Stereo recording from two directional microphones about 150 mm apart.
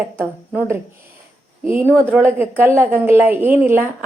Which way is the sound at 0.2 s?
15° right (ahead or behind).